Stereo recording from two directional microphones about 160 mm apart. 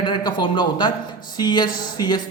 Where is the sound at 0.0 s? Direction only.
30° left (ahead or behind).